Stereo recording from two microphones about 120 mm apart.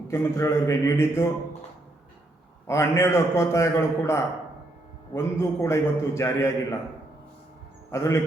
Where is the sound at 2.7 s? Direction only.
25° left (ahead or behind).